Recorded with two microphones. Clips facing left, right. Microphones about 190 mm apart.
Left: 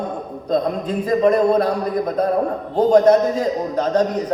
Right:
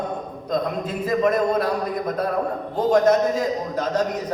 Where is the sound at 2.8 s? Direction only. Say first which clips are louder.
Left 5 dB; 30° left (ahead or behind).